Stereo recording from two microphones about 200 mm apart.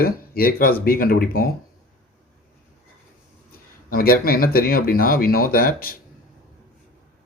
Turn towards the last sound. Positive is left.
turn(degrees=45)  # may be behind; listen again after turning